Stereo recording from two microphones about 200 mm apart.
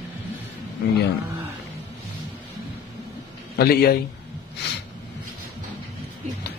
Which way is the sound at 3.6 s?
50° left (ahead or behind).